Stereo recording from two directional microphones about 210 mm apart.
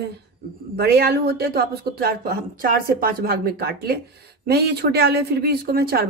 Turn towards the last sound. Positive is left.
turn(degrees=-45)  # may be behind; listen again after turning